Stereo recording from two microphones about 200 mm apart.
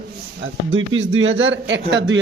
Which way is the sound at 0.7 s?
75° right (ahead or behind).